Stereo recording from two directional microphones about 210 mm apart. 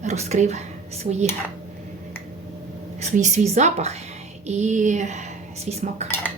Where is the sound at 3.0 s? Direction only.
35° right (ahead or behind).